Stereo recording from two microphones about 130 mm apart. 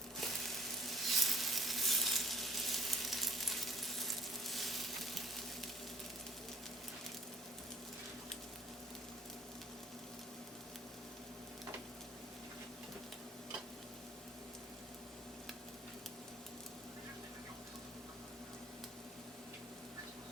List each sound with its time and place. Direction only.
0.9 s sizzle: centre (ahead or behind)